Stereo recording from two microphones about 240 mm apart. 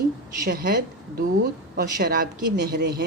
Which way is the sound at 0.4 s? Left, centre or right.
Right.